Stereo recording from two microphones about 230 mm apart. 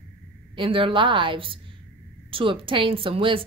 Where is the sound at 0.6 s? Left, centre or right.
Right.